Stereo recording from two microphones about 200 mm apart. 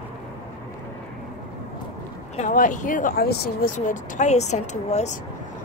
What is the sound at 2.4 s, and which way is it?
Speech, 40° left (ahead or behind).